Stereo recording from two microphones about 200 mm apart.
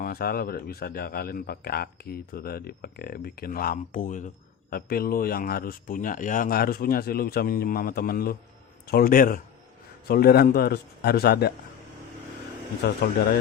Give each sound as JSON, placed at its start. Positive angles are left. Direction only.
{"t": 0.0, "sound": "a man's voice", "side_deg": 50}
{"t": 12.8, "sound": "a man's voice", "side_deg": 55}